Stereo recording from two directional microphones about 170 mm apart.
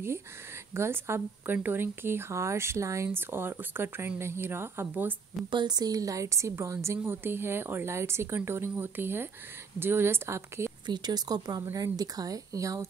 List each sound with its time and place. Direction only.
0.7 s speech: 15° right (ahead or behind)
5.5 s a woman's voice: 25° right (ahead or behind)